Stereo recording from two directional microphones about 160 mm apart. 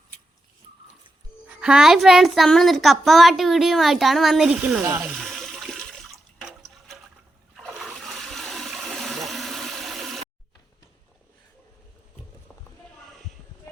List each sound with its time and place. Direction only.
1.6 s a child's voice: 5° right (ahead or behind)
5.0 s toilet flush: centre (ahead or behind)
7.5 s water: centre (ahead or behind)